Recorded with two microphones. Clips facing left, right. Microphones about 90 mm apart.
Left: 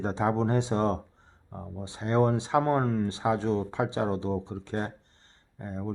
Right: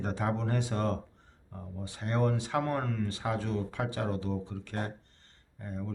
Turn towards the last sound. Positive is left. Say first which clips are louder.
# left 4 dB
turn(degrees=25)  # may be behind; listen again after turning